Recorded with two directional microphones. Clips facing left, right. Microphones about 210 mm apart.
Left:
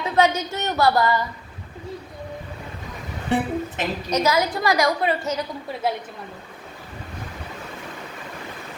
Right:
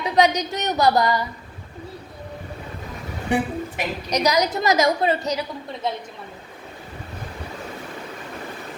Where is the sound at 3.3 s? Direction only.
15° right (ahead or behind).